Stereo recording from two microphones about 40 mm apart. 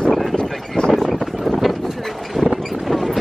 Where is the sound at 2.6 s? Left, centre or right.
Centre.